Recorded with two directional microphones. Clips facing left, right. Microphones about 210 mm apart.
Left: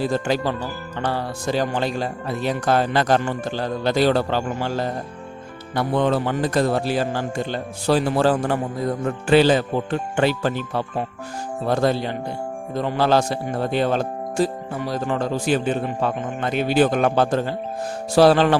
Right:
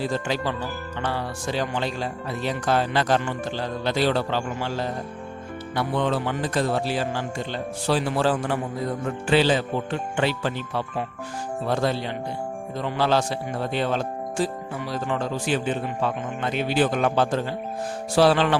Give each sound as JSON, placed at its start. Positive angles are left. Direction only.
{"t": 0.0, "sound": "speech", "side_deg": 40}
{"t": 18.1, "sound": "tuning fork", "side_deg": 40}